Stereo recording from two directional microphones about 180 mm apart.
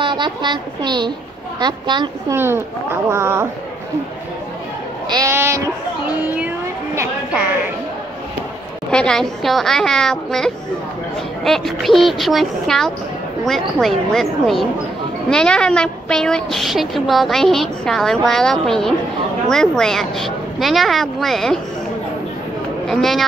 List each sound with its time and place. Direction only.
0.0 s speech: 25° right (ahead or behind)
2.3 s speech: 15° right (ahead or behind)
5.0 s speech: 20° right (ahead or behind)
6.0 s a sound: 10° right (ahead or behind)
8.9 s a woman's voice: 5° left (ahead or behind)
22.8 s a woman's voice: centre (ahead or behind)